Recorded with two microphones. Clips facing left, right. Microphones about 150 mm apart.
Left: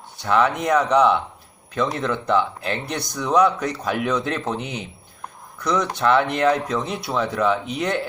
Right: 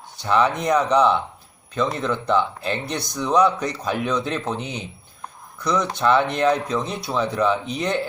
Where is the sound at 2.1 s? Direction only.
10° left (ahead or behind).